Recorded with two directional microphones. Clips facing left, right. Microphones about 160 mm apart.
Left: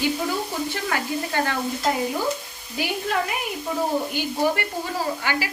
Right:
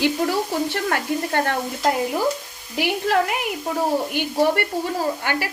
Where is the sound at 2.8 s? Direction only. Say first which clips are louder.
Right 5 dB; 75° right (ahead or behind).